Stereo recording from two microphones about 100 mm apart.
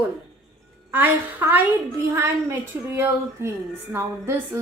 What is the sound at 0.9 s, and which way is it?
A woman's voice, 20° right (ahead or behind).